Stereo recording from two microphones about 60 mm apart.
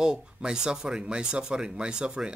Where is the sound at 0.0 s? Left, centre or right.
Centre.